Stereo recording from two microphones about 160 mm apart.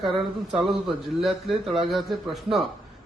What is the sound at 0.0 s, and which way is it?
Speech, centre (ahead or behind).